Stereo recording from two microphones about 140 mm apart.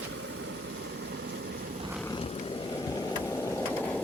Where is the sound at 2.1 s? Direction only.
45° left (ahead or behind); by 4.0 s 10° left (ahead or behind).